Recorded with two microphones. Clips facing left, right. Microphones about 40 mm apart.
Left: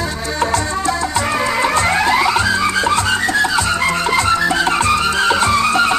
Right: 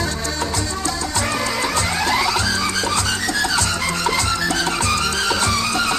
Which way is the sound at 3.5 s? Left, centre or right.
Left.